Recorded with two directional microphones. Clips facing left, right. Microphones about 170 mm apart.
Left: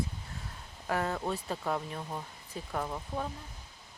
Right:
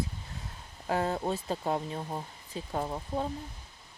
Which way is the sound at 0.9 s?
25° right (ahead or behind).